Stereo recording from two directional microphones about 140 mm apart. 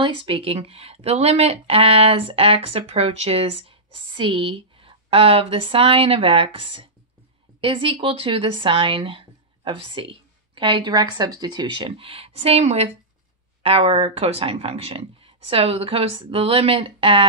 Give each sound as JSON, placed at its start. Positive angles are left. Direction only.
{"t": 0.0, "sound": "speech", "side_deg": -40}